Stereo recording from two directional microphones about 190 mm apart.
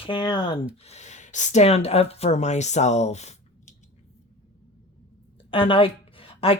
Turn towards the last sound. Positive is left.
turn(degrees=30)  # may be behind; listen again after turning